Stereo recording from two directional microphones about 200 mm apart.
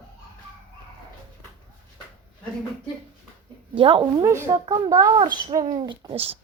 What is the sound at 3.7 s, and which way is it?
Speech, 25° right (ahead or behind).